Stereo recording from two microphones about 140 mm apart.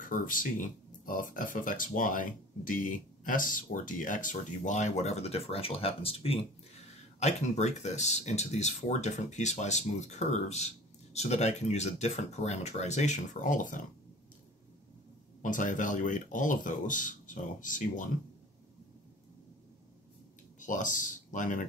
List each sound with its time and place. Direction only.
0.0 s speech: 70° left (ahead or behind)
15.4 s speech: 65° left (ahead or behind)
20.5 s speech: 65° left (ahead or behind)